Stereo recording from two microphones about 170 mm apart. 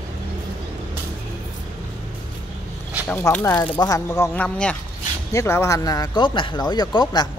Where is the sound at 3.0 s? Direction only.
15° left (ahead or behind).